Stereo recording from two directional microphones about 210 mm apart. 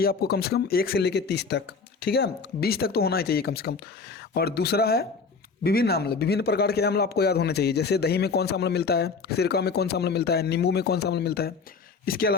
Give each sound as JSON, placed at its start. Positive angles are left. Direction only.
{"t": 0.0, "sound": "a man's voice", "side_deg": 45}